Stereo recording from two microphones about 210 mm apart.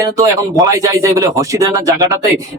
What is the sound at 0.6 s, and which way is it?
Speech, 15° right (ahead or behind).